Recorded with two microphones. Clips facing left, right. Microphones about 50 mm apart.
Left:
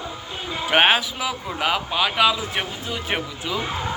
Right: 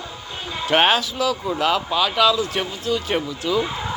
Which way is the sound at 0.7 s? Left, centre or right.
Centre.